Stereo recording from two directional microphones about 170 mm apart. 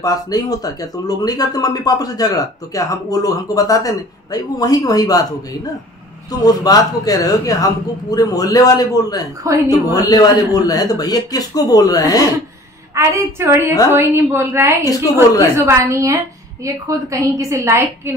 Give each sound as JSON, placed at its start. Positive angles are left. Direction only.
{"t": 0.0, "sound": "speech", "side_deg": 20}
{"t": 6.3, "sound": "speech", "side_deg": 20}
{"t": 12.9, "sound": "a woman's voice", "side_deg": -15}